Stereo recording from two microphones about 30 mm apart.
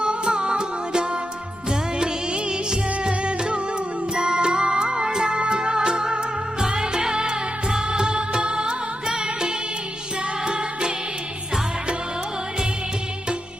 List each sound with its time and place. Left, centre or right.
0.0 s music: right